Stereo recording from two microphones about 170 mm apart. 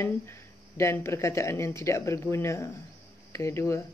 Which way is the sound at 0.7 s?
15° left (ahead or behind).